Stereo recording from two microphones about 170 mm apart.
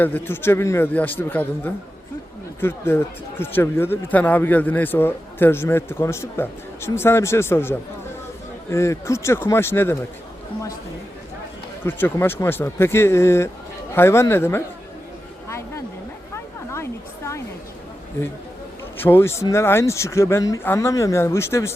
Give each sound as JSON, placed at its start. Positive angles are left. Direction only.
{"t": 0.0, "sound": "speech", "side_deg": 10}
{"t": 11.9, "sound": "speech", "side_deg": 10}
{"t": 15.4, "sound": "a sound", "side_deg": 15}
{"t": 19.0, "sound": "speech", "side_deg": 15}